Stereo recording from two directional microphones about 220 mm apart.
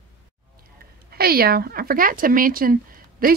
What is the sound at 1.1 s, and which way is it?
Speech, 45° right (ahead or behind).